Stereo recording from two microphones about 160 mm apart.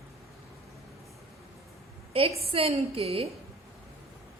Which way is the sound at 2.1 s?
40° right (ahead or behind).